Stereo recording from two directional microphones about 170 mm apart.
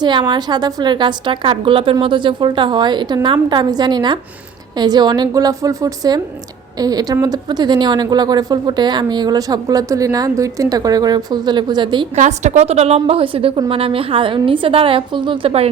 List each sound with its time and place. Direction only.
0.0 s a woman's voice: 25° right (ahead or behind)
12.1 s a woman's voice: 45° right (ahead or behind)